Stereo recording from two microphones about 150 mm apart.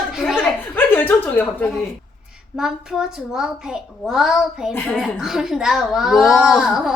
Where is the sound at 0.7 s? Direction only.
10° left (ahead or behind).